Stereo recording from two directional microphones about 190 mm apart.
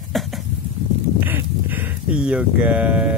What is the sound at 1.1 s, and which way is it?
Speech, 10° right (ahead or behind).